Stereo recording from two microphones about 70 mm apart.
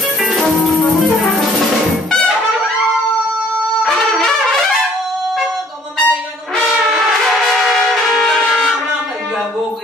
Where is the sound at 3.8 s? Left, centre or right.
Centre.